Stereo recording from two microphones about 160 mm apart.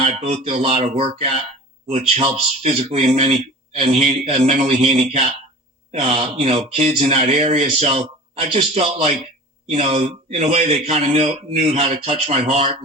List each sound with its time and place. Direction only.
0.0 s speech: 40° right (ahead or behind)